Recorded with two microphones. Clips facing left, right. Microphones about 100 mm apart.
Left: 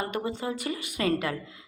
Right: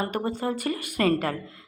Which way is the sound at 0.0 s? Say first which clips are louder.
Right 3 dB; 45° right (ahead or behind).